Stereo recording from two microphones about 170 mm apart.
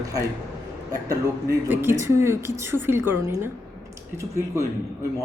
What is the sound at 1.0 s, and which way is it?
Speech, 20° right (ahead or behind).